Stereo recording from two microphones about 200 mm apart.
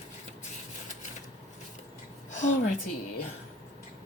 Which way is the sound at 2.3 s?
40° left (ahead or behind).